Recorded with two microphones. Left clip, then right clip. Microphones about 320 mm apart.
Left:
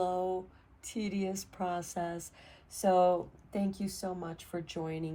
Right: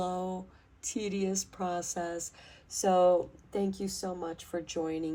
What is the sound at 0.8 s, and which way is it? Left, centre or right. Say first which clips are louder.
Speech: right 3 dB; right.